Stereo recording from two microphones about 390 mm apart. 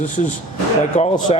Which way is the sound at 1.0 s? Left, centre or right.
Centre.